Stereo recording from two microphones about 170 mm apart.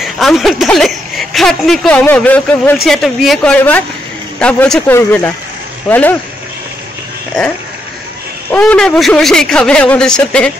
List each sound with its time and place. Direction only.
0.0 s speech: centre (ahead or behind)
8.5 s speech: 10° left (ahead or behind)